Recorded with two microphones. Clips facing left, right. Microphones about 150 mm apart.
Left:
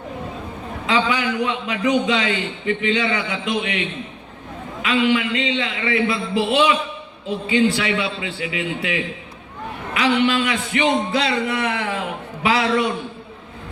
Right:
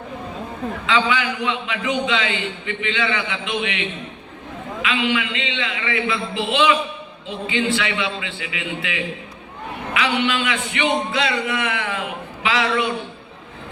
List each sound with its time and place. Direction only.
0.9 s a man's voice: 40° left (ahead or behind)
4.8 s a man's voice: 40° left (ahead or behind)